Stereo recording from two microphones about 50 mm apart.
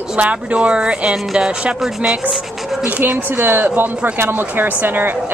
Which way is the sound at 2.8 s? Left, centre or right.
Right.